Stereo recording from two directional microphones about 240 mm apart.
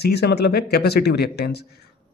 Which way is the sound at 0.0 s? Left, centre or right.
Left.